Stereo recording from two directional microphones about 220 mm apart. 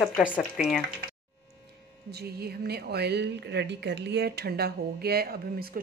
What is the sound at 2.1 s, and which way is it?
Speech, 45° right (ahead or behind).